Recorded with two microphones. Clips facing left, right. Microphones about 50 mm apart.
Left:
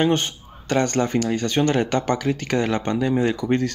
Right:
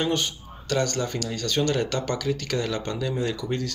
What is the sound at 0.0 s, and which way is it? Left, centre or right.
Speech, left.